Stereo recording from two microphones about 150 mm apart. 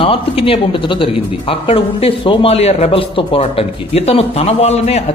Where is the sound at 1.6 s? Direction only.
40° left (ahead or behind).